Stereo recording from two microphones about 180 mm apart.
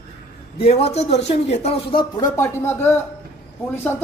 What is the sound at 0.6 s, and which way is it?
A man's voice, 35° left (ahead or behind).